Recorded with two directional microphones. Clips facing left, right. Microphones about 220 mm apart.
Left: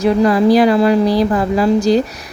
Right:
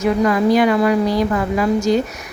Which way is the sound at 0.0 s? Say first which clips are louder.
Left 4 dB; 35° left (ahead or behind).